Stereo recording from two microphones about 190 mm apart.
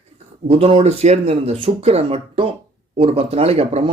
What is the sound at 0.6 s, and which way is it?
Speech, 30° right (ahead or behind).